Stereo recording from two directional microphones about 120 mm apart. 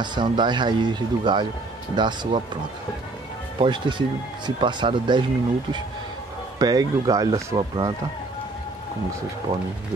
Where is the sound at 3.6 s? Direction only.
40° right (ahead or behind).